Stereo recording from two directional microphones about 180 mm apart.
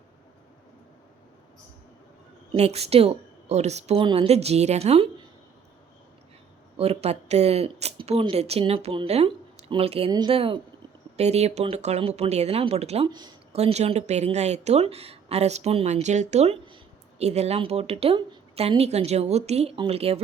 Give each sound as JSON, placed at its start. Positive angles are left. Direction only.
{"t": 2.5, "sound": "speech", "side_deg": -35}
{"t": 6.7, "sound": "a woman's voice", "side_deg": -35}
{"t": 13.1, "sound": "a woman's voice", "side_deg": -25}
{"t": 13.5, "sound": "speech", "side_deg": -35}